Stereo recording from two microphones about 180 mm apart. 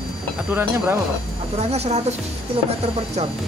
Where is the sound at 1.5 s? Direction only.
35° right (ahead or behind).